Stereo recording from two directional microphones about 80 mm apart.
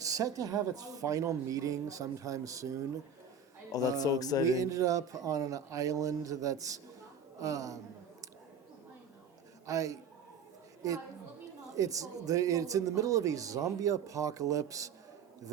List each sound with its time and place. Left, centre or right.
0.0 s speech: right
3.7 s speech: left
4.5 s speech: right
9.6 s speech: right
11.7 s speech: right